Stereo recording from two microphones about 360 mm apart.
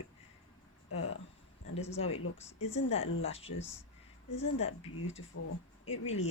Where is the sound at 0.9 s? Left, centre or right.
Left.